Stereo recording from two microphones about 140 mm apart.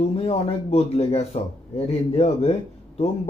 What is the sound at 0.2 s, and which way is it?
A man's voice, 45° left (ahead or behind).